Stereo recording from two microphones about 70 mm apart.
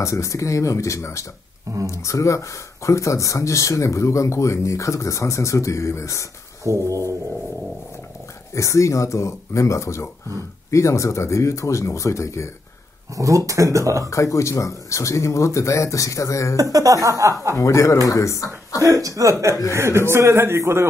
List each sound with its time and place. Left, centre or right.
0.0 s speech: left
6.6 s speech: right
8.5 s speech: left
13.1 s speech: right
14.1 s speech: left
16.5 s speech: right
17.6 s speech: left
18.8 s speech: right
19.7 s a man's voice: right